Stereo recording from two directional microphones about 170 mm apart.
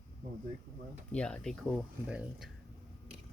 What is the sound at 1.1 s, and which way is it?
Speech, 5° left (ahead or behind).